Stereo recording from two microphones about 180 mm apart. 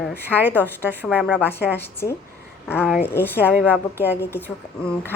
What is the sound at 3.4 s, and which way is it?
Speech, 10° right (ahead or behind).